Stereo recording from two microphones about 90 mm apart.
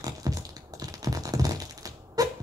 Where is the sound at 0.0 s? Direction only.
45° right (ahead or behind).